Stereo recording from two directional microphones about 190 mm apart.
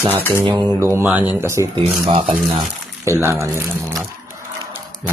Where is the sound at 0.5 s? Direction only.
15° right (ahead or behind).